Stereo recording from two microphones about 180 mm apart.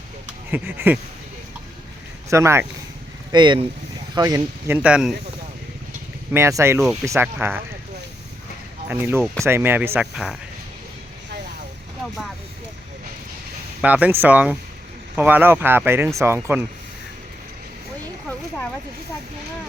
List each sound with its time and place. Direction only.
0.5 s speech: 10° right (ahead or behind)
2.3 s speech: 15° right (ahead or behind)
3.3 s speech: 25° right (ahead or behind); by 5.1 s 5° right (ahead or behind)
6.3 s speech: 15° right (ahead or behind)
8.9 s speech: 10° right (ahead or behind)
13.8 s speech: 10° right (ahead or behind)